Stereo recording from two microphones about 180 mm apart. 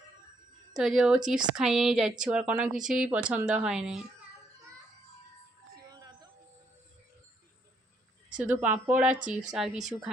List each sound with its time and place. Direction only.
0.8 s a woman's voice: centre (ahead or behind)
5.9 s music: 20° right (ahead or behind)
8.4 s a woman's voice: 10° right (ahead or behind)